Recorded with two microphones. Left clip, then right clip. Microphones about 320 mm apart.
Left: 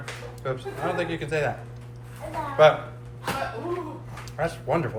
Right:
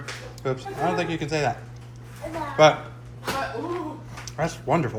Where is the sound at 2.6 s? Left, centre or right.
Right.